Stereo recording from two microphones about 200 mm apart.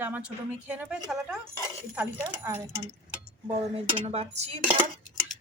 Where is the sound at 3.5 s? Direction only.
30° right (ahead or behind).